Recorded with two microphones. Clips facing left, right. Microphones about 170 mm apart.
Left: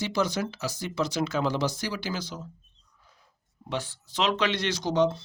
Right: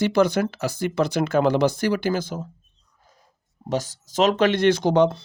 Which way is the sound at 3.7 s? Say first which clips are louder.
Right 7 dB; 40° right (ahead or behind).